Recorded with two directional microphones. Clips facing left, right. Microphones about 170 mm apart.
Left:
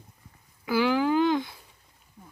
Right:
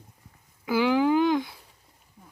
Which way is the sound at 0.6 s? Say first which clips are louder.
Right 2 dB; 20° right (ahead or behind).